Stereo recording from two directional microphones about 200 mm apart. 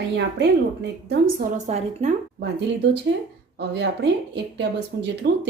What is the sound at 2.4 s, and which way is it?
Speech, 65° right (ahead or behind).